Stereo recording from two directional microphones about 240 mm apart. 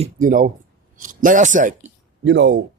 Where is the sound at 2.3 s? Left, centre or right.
Right.